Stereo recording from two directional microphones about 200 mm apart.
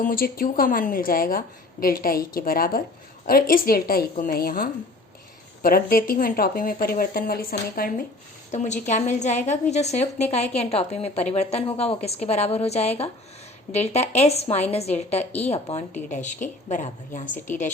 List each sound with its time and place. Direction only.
0.0 s a woman's voice: 45° left (ahead or behind)
8.5 s a woman's voice: 35° left (ahead or behind)